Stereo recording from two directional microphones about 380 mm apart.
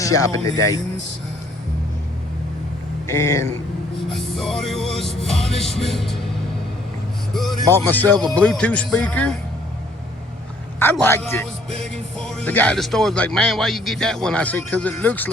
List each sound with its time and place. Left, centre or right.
0.0 s speech: centre
3.1 s speech: centre
4.4 s music: centre
5.5 s speech: centre
7.3 s speech: centre
10.8 s speech: centre